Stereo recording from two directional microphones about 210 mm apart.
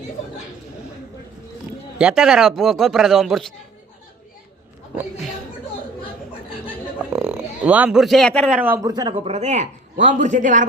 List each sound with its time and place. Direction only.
2.0 s a man's voice: 5° right (ahead or behind)
7.1 s a sound: 5° right (ahead or behind)
8.5 s speech: 10° right (ahead or behind)
8.9 s a man's voice: 20° right (ahead or behind); by 10.7 s 35° right (ahead or behind)